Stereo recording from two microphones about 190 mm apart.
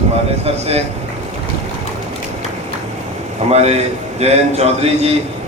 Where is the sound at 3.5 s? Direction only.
35° right (ahead or behind).